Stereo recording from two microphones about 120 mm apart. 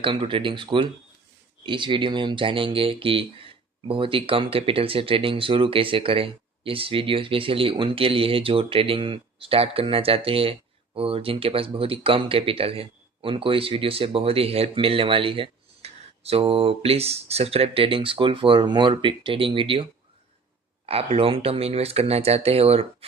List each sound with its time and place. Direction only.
0.0 s speech: 45° right (ahead or behind)